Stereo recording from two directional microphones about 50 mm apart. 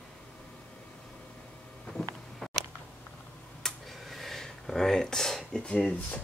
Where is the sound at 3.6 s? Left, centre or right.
Centre.